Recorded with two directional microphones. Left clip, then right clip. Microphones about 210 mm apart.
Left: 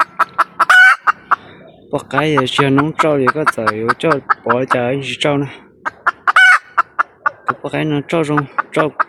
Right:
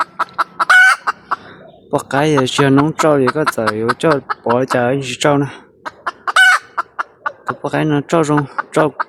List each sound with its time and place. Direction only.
0.0 s chicken: centre (ahead or behind)
0.9 s fowl: 15° right (ahead or behind)
6.7 s a sound: centre (ahead or behind)
7.6 s speech: 15° right (ahead or behind)